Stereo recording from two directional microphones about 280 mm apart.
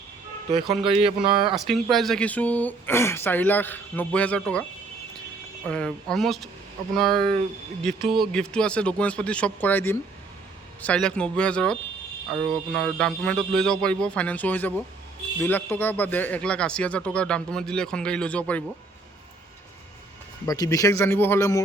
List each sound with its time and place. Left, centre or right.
0.6 s speech: centre
1.0 s speech: centre
1.5 s speech: centre
5.6 s speech: centre
20.5 s speech: centre